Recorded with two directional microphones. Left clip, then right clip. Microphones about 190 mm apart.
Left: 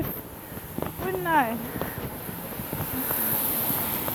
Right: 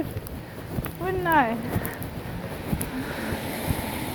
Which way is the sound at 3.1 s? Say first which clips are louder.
Right 2 dB; 40° left (ahead or behind).